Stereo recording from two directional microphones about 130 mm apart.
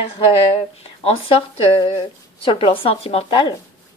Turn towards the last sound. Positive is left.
turn(degrees=50)  # may be behind; listen again after turning